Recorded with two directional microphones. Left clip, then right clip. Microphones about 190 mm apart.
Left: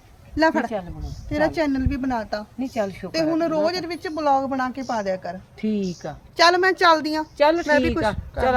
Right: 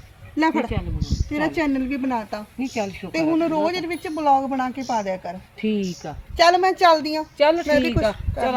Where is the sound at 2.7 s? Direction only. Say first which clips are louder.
Left 2 dB; 15° left (ahead or behind).